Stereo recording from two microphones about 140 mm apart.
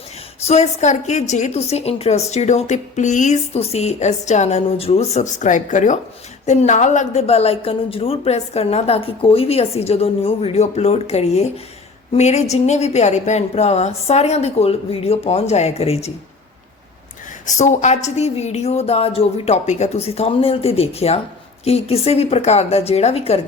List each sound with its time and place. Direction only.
0.4 s a woman's voice: 55° left (ahead or behind)
17.4 s a woman's voice: 60° left (ahead or behind)